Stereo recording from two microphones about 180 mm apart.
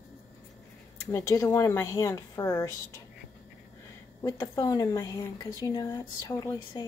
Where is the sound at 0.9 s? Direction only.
15° left (ahead or behind).